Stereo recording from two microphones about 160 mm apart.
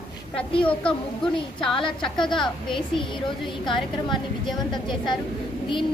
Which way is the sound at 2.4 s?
30° left (ahead or behind).